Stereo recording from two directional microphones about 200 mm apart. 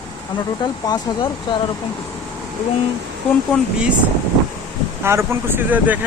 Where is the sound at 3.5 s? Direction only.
5° right (ahead or behind).